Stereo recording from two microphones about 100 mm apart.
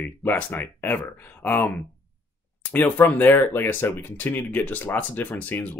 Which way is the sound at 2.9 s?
15° left (ahead or behind).